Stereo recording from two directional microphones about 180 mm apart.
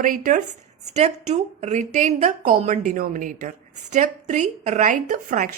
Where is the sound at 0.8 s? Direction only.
40° right (ahead or behind).